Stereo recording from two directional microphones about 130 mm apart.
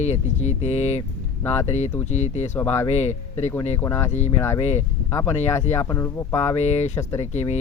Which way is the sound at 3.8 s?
20° left (ahead or behind).